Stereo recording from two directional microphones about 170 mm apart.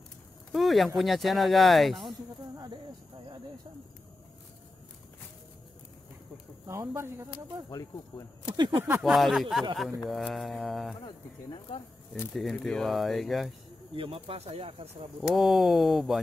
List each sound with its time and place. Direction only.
0.5 s speech: centre (ahead or behind)
6.7 s speech: 15° right (ahead or behind)
7.7 s speech: 20° left (ahead or behind)
8.5 s speech: 25° right (ahead or behind)
9.0 s speech: centre (ahead or behind)
12.4 s speech: centre (ahead or behind)
13.9 s speech: 30° right (ahead or behind)
15.3 s speech: centre (ahead or behind)